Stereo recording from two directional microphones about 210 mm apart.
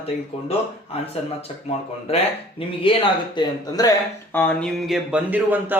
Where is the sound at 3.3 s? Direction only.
20° left (ahead or behind).